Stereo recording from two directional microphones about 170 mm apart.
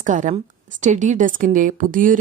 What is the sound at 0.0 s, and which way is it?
Speech, 50° right (ahead or behind).